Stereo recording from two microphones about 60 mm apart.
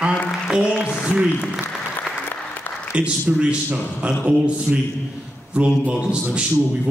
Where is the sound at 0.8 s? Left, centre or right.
Centre.